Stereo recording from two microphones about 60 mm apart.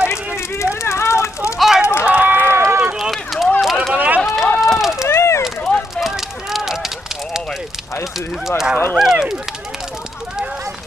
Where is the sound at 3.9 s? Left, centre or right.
Right.